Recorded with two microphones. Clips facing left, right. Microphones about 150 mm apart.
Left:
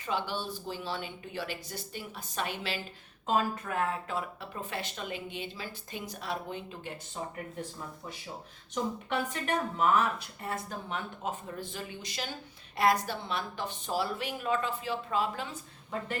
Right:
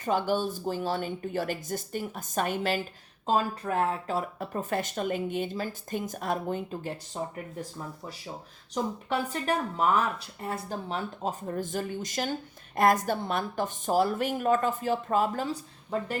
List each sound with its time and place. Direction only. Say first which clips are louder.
0.0 s speech: right 7 dB; 45° right (ahead or behind)
3.2 s speech: right 3 dB; 35° right (ahead or behind)
8.7 s speech: right 3 dB; 35° right (ahead or behind)